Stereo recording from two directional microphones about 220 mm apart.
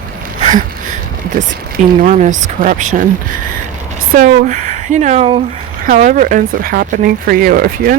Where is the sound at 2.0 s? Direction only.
35° right (ahead or behind).